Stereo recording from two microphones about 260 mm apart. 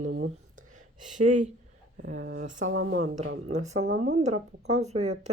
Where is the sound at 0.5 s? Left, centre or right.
Right.